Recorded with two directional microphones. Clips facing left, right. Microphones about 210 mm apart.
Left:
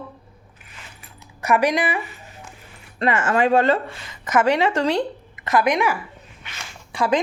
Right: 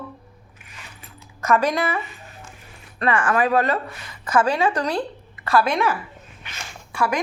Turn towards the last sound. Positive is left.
turn(degrees=20)  # may be behind; listen again after turning